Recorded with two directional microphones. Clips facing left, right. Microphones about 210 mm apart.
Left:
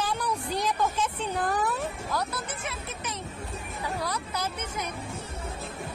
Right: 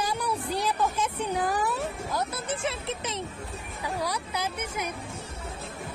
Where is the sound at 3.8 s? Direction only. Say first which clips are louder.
Right 2 dB; 10° right (ahead or behind).